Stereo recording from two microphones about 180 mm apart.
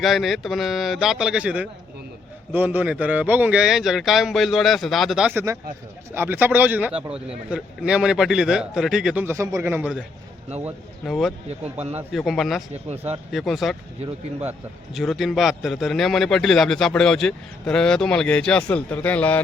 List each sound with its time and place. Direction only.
0.0 s a man's voice: centre (ahead or behind)
9.2 s a man's voice: 15° right (ahead or behind); by 11.3 s centre (ahead or behind)
11.4 s speech: 35° right (ahead or behind)
12.1 s a man's voice: centre (ahead or behind)
14.9 s a man's voice: centre (ahead or behind)